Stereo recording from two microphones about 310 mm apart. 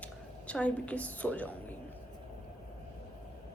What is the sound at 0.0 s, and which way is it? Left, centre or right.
A woman's voice, centre.